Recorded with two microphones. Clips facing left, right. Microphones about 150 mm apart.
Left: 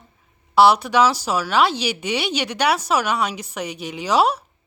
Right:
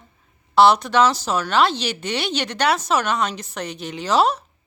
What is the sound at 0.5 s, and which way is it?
Speech, 10° left (ahead or behind).